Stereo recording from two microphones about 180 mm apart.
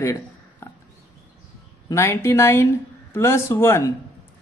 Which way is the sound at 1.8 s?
15° left (ahead or behind).